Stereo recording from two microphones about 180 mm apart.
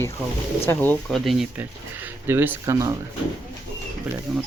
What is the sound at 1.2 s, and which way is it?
Speech, centre (ahead or behind).